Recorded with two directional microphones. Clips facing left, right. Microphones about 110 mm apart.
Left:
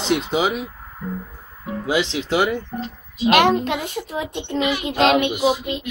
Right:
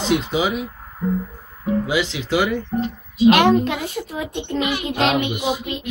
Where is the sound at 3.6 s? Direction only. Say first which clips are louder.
Even; 25° left (ahead or behind).